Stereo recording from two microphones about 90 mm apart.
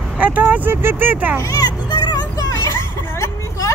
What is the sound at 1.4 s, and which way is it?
Children playing, 40° left (ahead or behind).